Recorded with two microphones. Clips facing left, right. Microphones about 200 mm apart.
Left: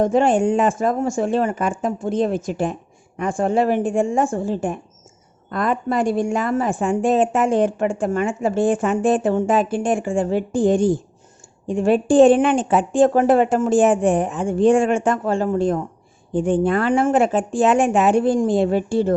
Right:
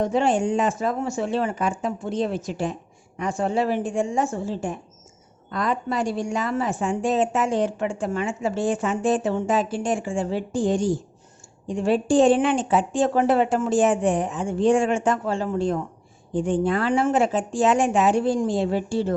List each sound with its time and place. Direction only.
0.0 s a woman's voice: 50° left (ahead or behind)